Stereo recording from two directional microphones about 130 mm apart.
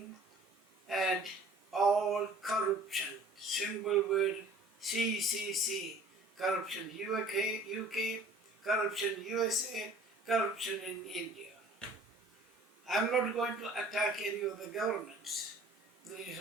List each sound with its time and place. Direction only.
0.9 s a sound: centre (ahead or behind)
3.4 s a man's voice: centre (ahead or behind)
12.8 s a man's voice: centre (ahead or behind)